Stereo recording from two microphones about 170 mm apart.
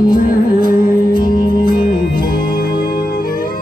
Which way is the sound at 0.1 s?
55° left (ahead or behind).